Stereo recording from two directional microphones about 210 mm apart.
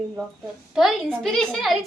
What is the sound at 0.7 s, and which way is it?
A woman's voice, centre (ahead or behind).